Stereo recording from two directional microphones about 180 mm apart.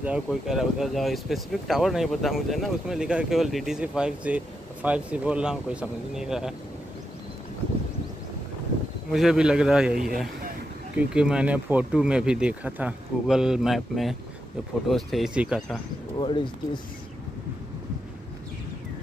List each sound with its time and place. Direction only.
0.0 s speech: 5° right (ahead or behind)
9.1 s speech: 5° right (ahead or behind)
16.2 s speech: 25° left (ahead or behind)